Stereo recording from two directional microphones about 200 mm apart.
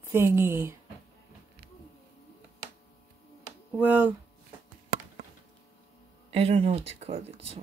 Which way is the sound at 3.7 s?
10° right (ahead or behind).